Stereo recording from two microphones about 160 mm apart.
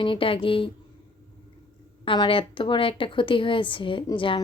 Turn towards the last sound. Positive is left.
turn(degrees=30)  # may be behind; listen again after turning